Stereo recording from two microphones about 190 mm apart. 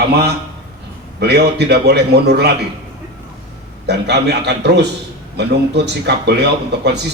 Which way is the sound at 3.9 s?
60° right (ahead or behind).